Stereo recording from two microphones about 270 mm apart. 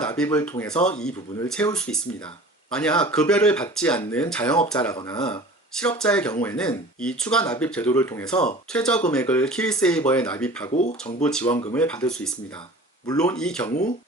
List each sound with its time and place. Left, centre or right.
0.0 s speech: centre
10.7 s speech: left
11.2 s speech: centre